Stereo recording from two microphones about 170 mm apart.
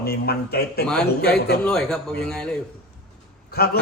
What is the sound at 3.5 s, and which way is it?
Speech, 65° left (ahead or behind).